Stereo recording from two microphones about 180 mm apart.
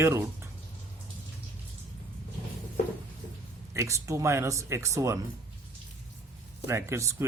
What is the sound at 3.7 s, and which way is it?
Speech, 15° right (ahead or behind).